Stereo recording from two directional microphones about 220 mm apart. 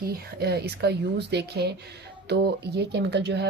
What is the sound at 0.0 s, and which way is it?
Speech, 45° right (ahead or behind).